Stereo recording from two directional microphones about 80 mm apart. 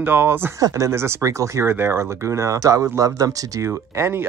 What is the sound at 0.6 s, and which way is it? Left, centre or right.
Speech, right.